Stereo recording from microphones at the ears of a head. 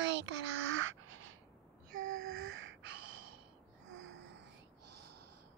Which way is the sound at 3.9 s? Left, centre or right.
Right.